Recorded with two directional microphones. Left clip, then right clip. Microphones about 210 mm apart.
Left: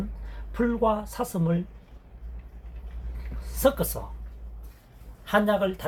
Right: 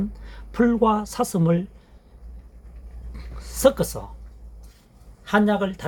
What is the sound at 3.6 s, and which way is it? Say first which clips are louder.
Speech: right 5 dB; 55° right (ahead or behind).